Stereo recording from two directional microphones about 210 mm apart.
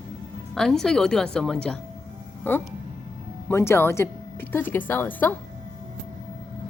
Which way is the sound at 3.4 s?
10° left (ahead or behind).